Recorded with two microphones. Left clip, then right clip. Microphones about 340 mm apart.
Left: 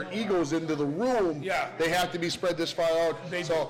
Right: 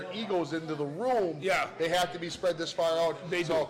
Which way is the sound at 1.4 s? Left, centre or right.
Right.